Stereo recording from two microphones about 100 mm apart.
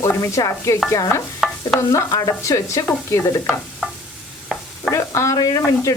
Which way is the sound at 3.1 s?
25° left (ahead or behind).